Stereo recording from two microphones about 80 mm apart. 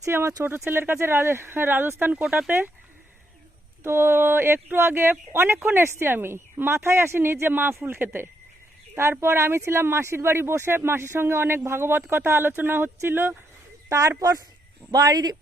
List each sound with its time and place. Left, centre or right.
0.0 s speech: right
3.8 s speech: right
13.9 s speech: right